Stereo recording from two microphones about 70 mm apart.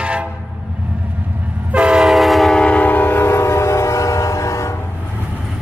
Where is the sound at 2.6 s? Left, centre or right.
Centre; by 4.7 s left.